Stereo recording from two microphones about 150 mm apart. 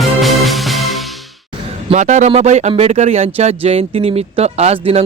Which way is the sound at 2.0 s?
50° right (ahead or behind).